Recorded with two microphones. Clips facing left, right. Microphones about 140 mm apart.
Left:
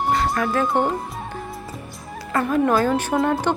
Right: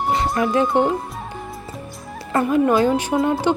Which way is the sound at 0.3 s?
20° right (ahead or behind).